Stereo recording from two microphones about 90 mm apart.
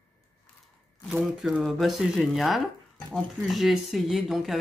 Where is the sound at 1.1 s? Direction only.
5° right (ahead or behind).